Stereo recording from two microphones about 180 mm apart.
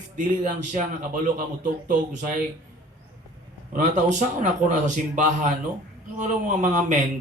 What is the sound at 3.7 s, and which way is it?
A man's voice, 40° right (ahead or behind).